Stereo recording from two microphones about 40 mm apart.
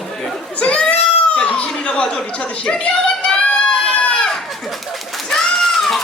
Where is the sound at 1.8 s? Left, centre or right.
Left.